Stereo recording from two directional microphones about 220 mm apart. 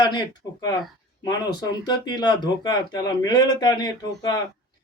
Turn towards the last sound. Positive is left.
turn(degrees=15)  # may be behind; listen again after turning